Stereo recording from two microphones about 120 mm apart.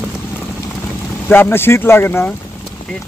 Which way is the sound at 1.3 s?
20° left (ahead or behind).